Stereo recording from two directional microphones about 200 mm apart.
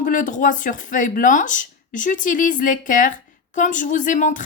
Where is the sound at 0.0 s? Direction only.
40° left (ahead or behind).